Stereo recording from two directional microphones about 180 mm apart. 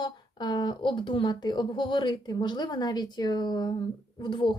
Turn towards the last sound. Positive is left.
turn(degrees=25)  # may be behind; listen again after turning